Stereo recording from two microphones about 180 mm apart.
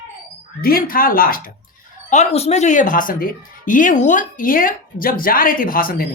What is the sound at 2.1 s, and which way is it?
Speech, 35° left (ahead or behind).